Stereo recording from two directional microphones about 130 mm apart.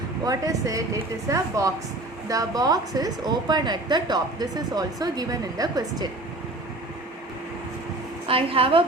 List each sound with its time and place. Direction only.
0.3 s a woman's voice: 25° right (ahead or behind)
8.3 s a woman's voice: 45° right (ahead or behind)